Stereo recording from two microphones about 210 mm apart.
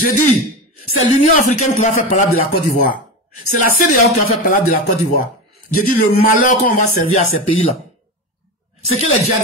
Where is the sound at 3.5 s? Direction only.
40° left (ahead or behind).